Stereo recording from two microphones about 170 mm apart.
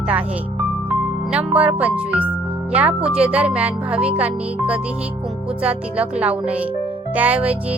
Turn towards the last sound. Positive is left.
turn(degrees=-5)  # may be behind; listen again after turning